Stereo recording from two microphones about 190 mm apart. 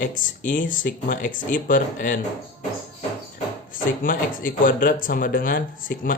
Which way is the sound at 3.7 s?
45° left (ahead or behind).